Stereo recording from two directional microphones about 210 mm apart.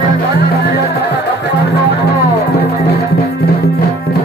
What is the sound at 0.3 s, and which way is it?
Music, 50° left (ahead or behind).